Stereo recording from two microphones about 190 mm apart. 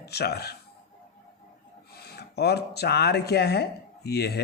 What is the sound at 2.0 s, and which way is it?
Speech, 55° left (ahead or behind).